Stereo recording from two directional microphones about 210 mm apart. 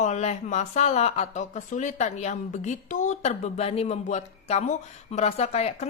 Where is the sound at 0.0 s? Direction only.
35° left (ahead or behind).